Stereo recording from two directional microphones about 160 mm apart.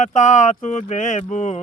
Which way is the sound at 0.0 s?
50° left (ahead or behind).